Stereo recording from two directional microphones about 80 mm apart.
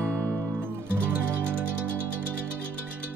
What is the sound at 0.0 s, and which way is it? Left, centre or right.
Music, right.